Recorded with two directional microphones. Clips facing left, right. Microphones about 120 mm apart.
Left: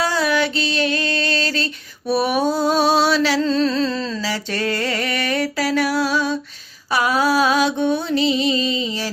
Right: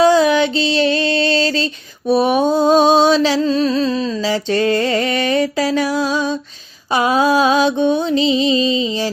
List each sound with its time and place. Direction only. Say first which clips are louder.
0.0 s music: right 8 dB; 20° right (ahead or behind)
6.9 s mantra: right 4 dB; 25° right (ahead or behind)